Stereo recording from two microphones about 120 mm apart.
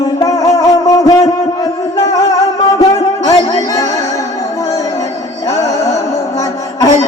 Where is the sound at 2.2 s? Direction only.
30° left (ahead or behind).